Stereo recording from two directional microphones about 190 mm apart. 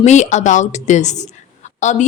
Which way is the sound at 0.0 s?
35° left (ahead or behind).